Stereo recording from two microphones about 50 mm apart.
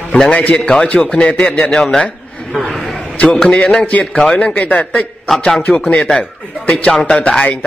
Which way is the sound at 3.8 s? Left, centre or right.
Left.